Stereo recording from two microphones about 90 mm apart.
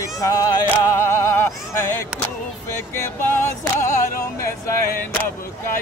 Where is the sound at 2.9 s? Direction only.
25° left (ahead or behind).